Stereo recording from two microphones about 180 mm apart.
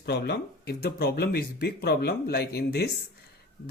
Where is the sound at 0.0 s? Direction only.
70° left (ahead or behind).